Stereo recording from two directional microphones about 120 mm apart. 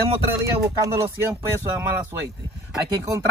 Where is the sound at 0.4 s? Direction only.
25° right (ahead or behind).